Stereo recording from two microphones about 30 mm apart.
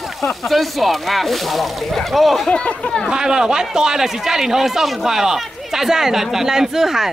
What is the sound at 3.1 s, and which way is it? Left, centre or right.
A man's voice, right.